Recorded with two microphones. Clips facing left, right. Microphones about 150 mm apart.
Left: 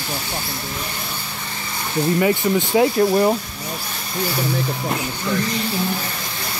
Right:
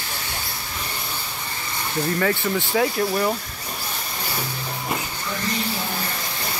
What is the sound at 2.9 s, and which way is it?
Speech, 30° left (ahead or behind).